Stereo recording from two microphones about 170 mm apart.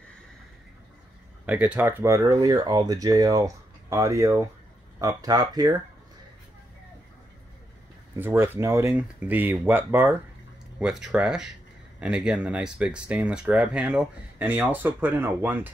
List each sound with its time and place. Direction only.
1.4 s speech: 10° right (ahead or behind)
8.2 s speech: 15° right (ahead or behind)
10.8 s speech: 5° right (ahead or behind)